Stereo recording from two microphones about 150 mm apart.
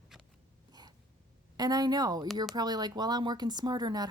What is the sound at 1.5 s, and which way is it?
A woman's voice, 25° right (ahead or behind).